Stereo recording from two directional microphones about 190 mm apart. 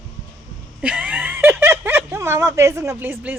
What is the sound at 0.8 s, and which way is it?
Speech, 5° right (ahead or behind).